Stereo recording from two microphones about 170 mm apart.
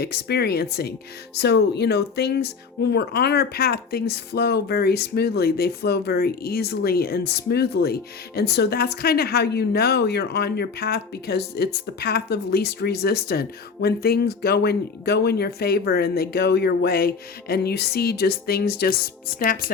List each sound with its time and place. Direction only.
0.0 s speech: 70° left (ahead or behind)